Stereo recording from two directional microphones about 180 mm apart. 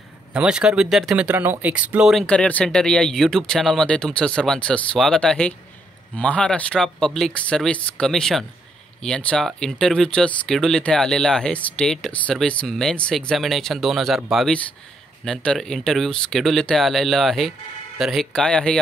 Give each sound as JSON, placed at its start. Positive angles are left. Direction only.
{"t": 0.3, "sound": "speech", "side_deg": -5}